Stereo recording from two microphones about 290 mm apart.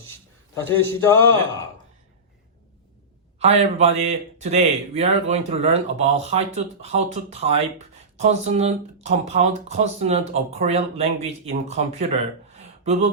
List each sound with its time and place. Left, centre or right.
0.8 s speech: centre
3.3 s a man's voice: right
12.5 s a sound: right